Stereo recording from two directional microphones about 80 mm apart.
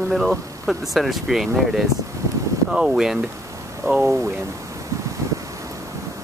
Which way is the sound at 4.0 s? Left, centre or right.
Right.